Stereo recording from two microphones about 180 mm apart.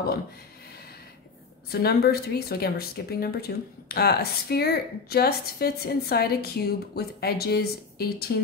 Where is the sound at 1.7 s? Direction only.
60° left (ahead or behind).